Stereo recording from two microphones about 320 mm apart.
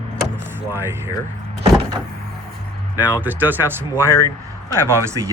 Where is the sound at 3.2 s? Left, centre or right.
Centre.